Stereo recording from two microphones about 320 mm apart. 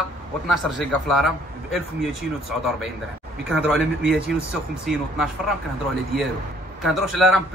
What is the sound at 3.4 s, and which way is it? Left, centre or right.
Speech, centre.